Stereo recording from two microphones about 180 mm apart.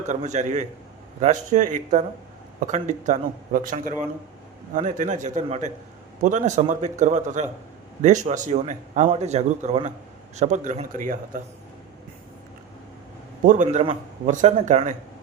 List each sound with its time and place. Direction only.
0.1 s a man's voice: 40° right (ahead or behind)
13.4 s a man's voice: 40° right (ahead or behind)